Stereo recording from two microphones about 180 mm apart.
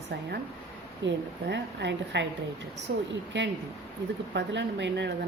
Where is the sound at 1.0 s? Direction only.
75° right (ahead or behind).